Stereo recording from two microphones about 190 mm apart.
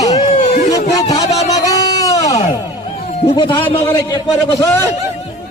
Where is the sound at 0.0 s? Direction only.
20° left (ahead or behind).